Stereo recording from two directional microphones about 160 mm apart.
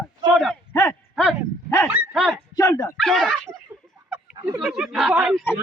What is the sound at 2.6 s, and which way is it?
Speech, 20° left (ahead or behind).